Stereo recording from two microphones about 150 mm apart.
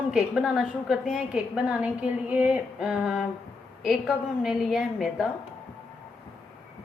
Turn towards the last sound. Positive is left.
turn(degrees=-5)  # may be behind; listen again after turning